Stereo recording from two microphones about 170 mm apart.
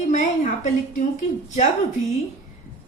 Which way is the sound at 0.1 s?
45° left (ahead or behind).